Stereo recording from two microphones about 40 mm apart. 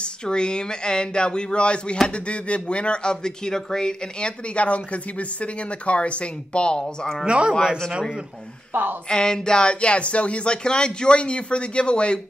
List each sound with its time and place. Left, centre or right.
0.0 s speech: left
4.2 s speech: left
7.2 s speech: right
7.5 s speech: centre
8.7 s speech: right
9.1 s speech: centre